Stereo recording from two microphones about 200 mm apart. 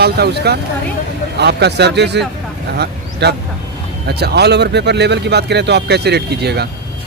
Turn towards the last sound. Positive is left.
turn(degrees=-55)  # may be behind; listen again after turning